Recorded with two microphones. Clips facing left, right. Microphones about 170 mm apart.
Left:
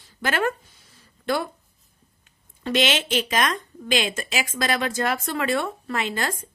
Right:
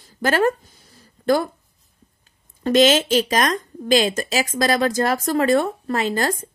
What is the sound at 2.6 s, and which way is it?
Speech, 40° right (ahead or behind).